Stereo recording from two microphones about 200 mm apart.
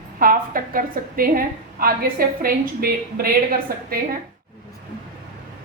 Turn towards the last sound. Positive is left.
turn(degrees=-45)  # may be behind; listen again after turning